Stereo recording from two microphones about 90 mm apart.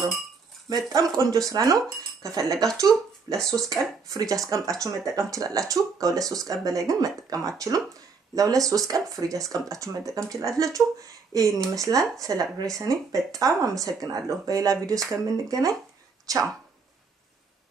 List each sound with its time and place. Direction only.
0.7 s speech: 45° right (ahead or behind)
3.3 s speech: 5° left (ahead or behind)
4.1 s speech: 40° right (ahead or behind)